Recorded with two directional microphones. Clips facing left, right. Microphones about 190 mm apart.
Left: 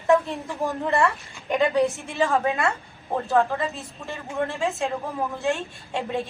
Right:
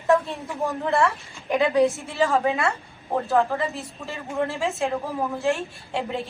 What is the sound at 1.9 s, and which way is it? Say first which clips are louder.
Speech: right 1 dB; 15° left (ahead or behind).